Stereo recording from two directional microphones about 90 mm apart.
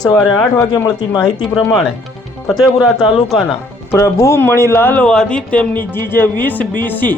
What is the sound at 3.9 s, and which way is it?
Speech, 35° left (ahead or behind).